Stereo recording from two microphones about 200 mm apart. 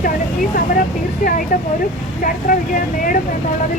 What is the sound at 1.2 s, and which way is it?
Speech, 45° left (ahead or behind).